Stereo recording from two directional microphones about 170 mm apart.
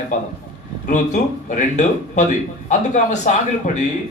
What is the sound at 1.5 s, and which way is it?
A man's voice, 45° left (ahead or behind).